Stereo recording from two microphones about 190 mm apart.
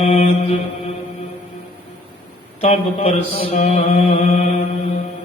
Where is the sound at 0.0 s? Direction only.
30° left (ahead or behind).